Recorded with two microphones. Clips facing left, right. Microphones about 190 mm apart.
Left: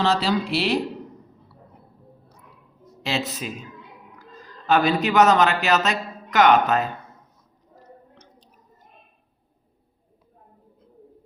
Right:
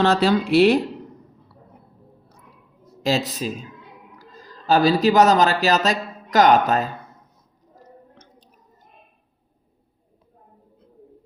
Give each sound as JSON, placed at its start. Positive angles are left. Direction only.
{"t": 0.0, "sound": "speech", "side_deg": -50}
{"t": 3.0, "sound": "speech", "side_deg": -40}